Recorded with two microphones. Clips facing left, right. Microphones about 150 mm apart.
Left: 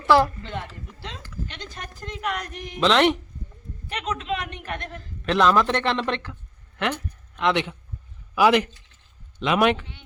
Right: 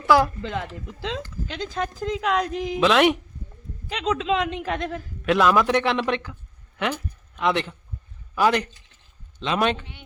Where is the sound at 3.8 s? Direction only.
90° right.